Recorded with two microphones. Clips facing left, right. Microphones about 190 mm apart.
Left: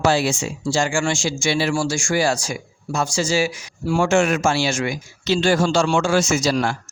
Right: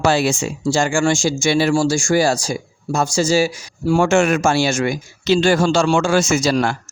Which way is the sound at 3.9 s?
55° right (ahead or behind).